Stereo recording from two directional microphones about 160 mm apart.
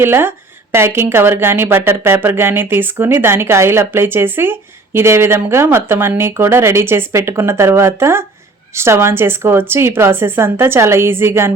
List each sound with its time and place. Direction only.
0.0 s speech: 15° right (ahead or behind)